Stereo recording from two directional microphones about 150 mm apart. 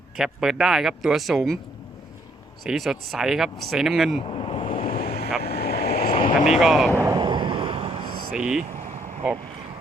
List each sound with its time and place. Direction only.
0.2 s speech: 5° right (ahead or behind)
2.6 s speech: centre (ahead or behind)
4.3 s waves: 35° left (ahead or behind)
5.4 s vehicle: 90° left; by 6.4 s 70° left (ahead or behind)
6.5 s speech: centre (ahead or behind)
7.2 s a sound: 30° right (ahead or behind)
8.0 s a sound: 80° right
8.3 s speech: 5° right (ahead or behind)